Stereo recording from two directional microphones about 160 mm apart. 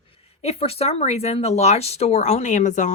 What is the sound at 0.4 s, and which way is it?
Speech, 40° left (ahead or behind).